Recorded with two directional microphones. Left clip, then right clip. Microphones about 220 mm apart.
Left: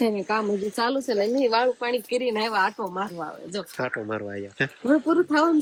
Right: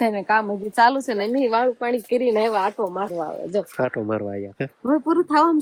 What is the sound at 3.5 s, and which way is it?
Speech, 25° right (ahead or behind).